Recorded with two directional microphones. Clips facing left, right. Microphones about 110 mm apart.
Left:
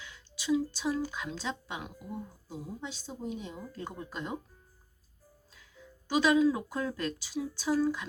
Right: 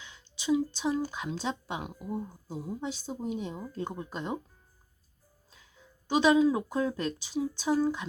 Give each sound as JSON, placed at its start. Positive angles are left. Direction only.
{"t": 0.0, "sound": "a sound", "side_deg": -25}
{"t": 1.4, "sound": "a woman's voice", "side_deg": -40}
{"t": 3.5, "sound": "speech", "side_deg": -25}
{"t": 6.1, "sound": "speech", "side_deg": -25}